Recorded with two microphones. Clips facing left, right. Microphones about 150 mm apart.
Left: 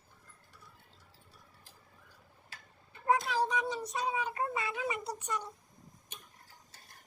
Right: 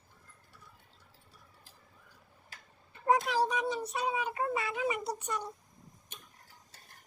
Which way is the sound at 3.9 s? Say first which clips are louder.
Right 1 dB; 15° right (ahead or behind).